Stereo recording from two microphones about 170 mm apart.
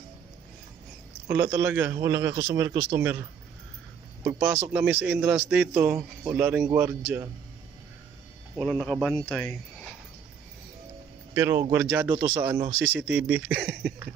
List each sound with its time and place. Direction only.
1.3 s a man's voice: 15° right (ahead or behind)
8.5 s speech: centre (ahead or behind)
11.3 s a man's voice: 15° right (ahead or behind)